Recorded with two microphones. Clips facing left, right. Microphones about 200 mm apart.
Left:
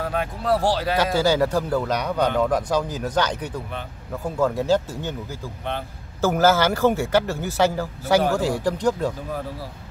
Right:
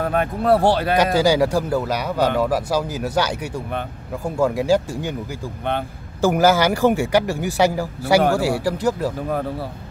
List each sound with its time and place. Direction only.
0.0 s speech: 55° right (ahead or behind)
0.9 s a man's voice: 15° right (ahead or behind)
6.2 s a man's voice: 15° right (ahead or behind)